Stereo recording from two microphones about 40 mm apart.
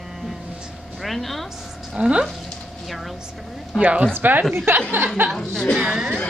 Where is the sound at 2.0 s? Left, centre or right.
Right.